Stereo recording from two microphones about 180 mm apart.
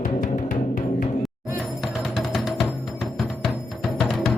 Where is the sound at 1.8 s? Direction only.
Centre (ahead or behind).